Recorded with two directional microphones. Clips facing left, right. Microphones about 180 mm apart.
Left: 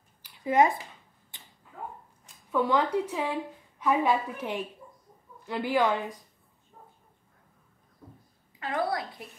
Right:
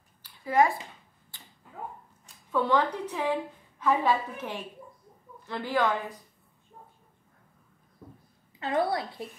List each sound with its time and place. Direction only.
0.2 s a sound: 20° left (ahead or behind)
1.3 s tick-tock: 20° left (ahead or behind)
2.5 s speech: 10° left (ahead or behind)
8.5 s a woman's voice: 25° right (ahead or behind)